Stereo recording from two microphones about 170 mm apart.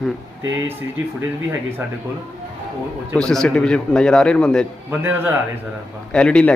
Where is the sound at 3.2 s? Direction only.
5° left (ahead or behind).